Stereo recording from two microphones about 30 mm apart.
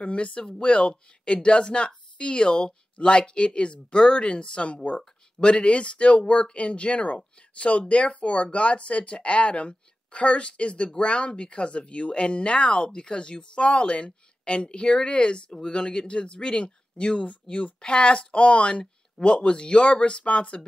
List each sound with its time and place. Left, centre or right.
0.0 s speech: left